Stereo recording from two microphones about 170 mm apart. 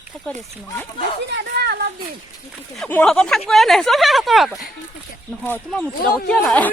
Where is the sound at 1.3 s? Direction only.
75° right (ahead or behind).